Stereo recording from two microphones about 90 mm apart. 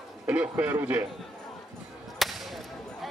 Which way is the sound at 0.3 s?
20° right (ahead or behind).